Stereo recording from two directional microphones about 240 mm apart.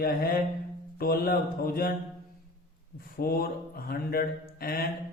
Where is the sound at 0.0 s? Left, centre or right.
Left.